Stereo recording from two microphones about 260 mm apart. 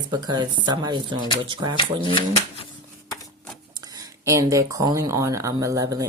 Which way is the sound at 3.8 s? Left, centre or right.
Centre.